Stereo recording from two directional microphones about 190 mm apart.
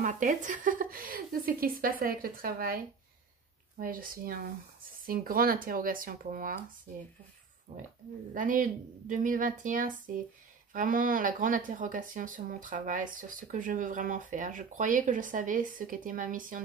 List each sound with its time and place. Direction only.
0.0 s speech: 40° right (ahead or behind)
7.7 s speech: 30° right (ahead or behind)
8.4 s speech: 45° right (ahead or behind)